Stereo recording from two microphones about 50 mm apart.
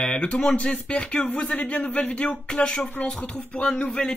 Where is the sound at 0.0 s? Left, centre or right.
Left.